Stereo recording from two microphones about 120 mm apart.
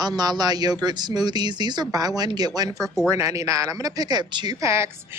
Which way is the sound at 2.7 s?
Centre (ahead or behind).